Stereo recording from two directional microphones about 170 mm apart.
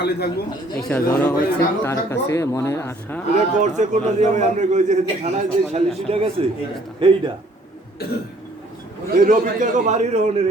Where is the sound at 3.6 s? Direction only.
45° right (ahead or behind).